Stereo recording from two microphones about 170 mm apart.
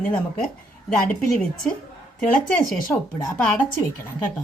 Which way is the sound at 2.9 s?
20° left (ahead or behind).